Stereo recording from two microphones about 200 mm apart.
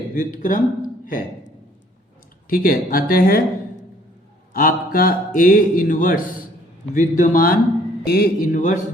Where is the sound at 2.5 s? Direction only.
45° left (ahead or behind).